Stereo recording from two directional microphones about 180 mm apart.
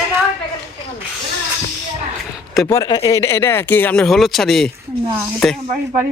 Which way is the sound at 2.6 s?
20° left (ahead or behind).